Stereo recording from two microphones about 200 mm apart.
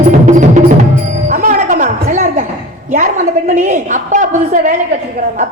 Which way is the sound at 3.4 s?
35° right (ahead or behind).